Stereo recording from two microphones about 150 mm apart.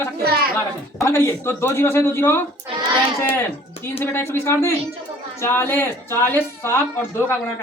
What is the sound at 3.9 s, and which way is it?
Speech, 15° left (ahead or behind).